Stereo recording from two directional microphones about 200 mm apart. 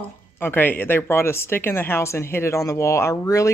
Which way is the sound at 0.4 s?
10° left (ahead or behind).